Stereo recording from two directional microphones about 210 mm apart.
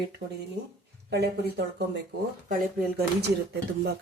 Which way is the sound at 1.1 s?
50° right (ahead or behind).